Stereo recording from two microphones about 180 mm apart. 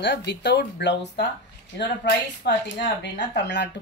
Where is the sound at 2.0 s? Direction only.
75° left (ahead or behind).